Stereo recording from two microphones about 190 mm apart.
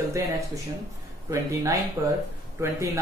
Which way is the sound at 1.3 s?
15° right (ahead or behind).